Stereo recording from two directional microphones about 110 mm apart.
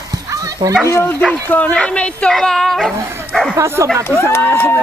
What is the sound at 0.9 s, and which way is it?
Speech, 20° left (ahead or behind).